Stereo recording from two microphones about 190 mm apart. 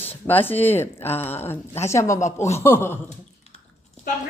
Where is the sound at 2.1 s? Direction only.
40° left (ahead or behind).